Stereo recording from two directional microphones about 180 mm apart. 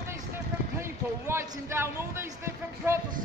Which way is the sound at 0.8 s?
15° right (ahead or behind).